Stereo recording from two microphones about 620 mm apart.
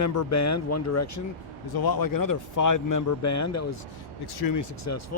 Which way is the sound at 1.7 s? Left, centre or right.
Left.